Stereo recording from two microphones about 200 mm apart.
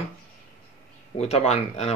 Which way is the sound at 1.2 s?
35° left (ahead or behind).